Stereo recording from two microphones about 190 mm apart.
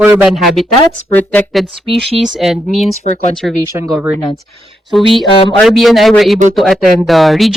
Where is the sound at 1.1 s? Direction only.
10° left (ahead or behind).